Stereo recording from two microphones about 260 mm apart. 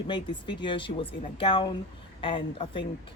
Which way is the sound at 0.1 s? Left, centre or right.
Centre.